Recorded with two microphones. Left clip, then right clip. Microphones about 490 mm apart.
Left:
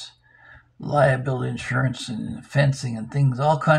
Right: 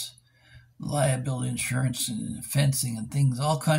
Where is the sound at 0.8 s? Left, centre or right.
Right.